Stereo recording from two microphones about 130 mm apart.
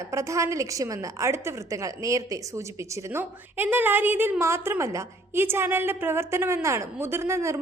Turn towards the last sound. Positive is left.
turn(degrees=-20)  # may be behind; listen again after turning